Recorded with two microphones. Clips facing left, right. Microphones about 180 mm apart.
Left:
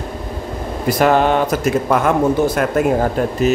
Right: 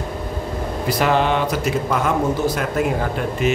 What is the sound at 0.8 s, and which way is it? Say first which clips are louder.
Speech: left 5 dB; 50° left (ahead or behind).